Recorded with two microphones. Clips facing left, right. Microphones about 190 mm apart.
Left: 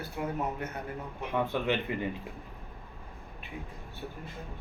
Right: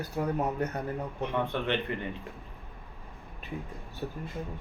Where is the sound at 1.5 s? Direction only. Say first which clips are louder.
Left 1 dB; 5° left (ahead or behind).